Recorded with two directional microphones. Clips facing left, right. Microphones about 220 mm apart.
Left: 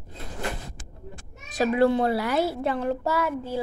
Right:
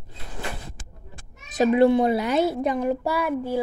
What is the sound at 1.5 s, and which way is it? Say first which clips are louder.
A child's voice: right 4 dB; 20° right (ahead or behind).